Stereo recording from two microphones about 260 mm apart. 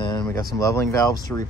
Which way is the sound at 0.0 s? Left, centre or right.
Centre.